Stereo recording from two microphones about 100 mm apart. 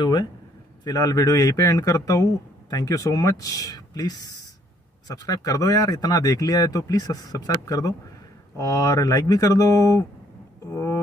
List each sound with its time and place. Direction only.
0.0 s speech: 45° left (ahead or behind); by 11.0 s 30° left (ahead or behind)